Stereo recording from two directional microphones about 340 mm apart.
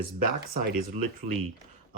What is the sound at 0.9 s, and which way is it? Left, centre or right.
Speech, right.